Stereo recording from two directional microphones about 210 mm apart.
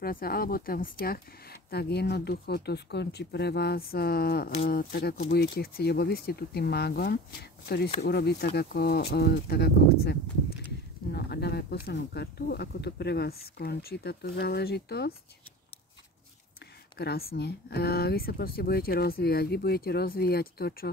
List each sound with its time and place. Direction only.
0.0 s speech: 45° left (ahead or behind)
16.9 s speech: 50° left (ahead or behind)